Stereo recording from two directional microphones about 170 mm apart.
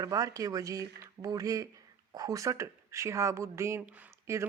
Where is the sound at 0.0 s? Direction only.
20° right (ahead or behind).